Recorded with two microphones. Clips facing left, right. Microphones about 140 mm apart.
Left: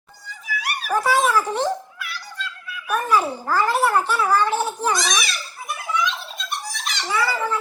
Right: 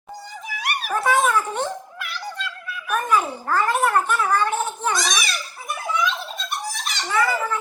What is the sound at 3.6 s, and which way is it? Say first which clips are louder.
A child's voice: left 1 dB; 30° left (ahead or behind).